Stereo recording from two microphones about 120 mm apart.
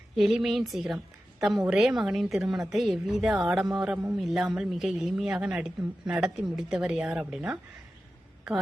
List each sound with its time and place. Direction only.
0.2 s a woman's voice: 5° right (ahead or behind)